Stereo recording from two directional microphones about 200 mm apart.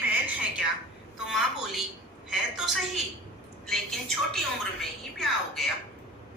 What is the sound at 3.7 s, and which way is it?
A woman's voice, centre (ahead or behind).